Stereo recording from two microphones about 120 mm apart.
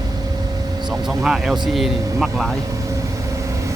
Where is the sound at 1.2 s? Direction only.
5° right (ahead or behind).